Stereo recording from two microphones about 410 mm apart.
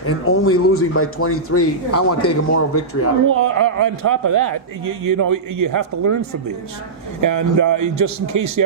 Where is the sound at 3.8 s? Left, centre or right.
Right.